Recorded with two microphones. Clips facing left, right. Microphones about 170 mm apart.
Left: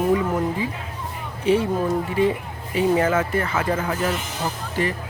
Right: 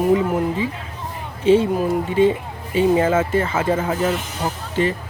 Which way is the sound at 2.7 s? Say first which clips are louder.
Right 3 dB; 25° right (ahead or behind).